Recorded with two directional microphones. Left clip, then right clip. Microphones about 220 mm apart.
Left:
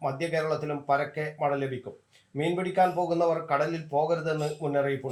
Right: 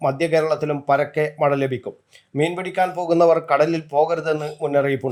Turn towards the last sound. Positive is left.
turn(degrees=-50)  # may be behind; listen again after turning